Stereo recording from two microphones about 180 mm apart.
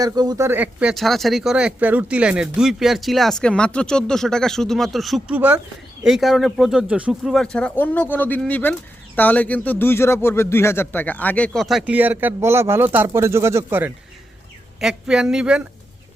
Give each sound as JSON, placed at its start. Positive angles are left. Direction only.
{"t": 0.0, "sound": "speech", "side_deg": -20}